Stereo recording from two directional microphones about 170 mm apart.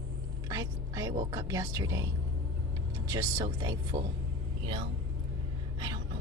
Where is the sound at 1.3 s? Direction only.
20° right (ahead or behind).